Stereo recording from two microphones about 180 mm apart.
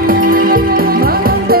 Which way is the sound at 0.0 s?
50° right (ahead or behind).